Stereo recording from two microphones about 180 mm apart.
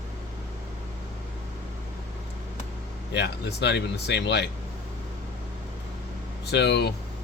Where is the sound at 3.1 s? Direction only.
70° left (ahead or behind).